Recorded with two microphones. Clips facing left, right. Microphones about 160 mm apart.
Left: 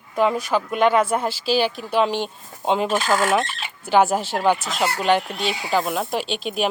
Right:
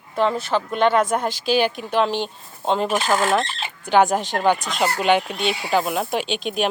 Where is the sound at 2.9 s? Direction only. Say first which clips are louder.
Even; 10° right (ahead or behind).